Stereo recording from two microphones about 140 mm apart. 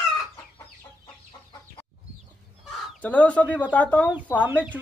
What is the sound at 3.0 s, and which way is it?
Speech, 10° left (ahead or behind).